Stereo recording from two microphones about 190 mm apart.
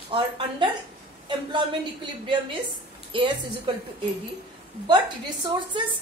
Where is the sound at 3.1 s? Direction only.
25° right (ahead or behind).